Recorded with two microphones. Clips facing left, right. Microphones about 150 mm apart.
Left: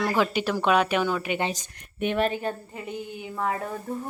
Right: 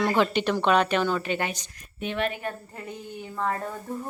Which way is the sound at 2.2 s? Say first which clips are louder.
Left 2 dB; 30° left (ahead or behind).